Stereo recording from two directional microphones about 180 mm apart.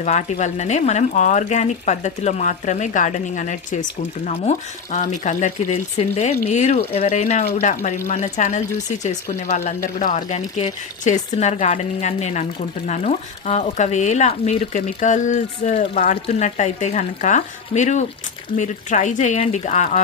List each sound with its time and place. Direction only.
0.0 s speech: 40° left (ahead or behind)